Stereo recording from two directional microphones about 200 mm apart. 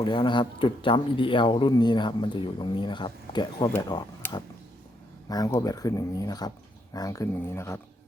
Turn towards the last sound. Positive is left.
turn(degrees=15)  # may be behind; listen again after turning